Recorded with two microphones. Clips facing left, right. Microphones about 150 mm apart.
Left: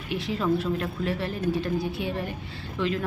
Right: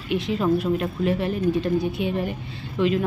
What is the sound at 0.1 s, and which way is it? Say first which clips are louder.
A woman's voice: right 4 dB; 20° right (ahead or behind).